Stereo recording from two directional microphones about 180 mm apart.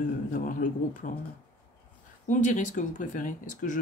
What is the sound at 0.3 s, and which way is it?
Speech, 50° left (ahead or behind).